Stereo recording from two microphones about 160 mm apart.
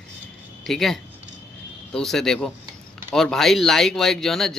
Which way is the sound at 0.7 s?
Centre (ahead or behind).